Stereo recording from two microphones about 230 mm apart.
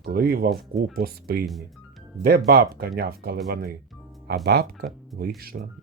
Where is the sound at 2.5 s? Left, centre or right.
Right.